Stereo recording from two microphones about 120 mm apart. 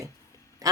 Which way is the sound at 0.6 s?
30° right (ahead or behind).